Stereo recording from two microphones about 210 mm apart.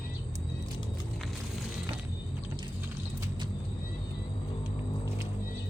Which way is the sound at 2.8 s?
10° right (ahead or behind).